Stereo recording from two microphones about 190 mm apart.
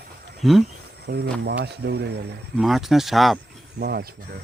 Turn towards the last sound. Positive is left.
turn(degrees=-55)  # may be behind; listen again after turning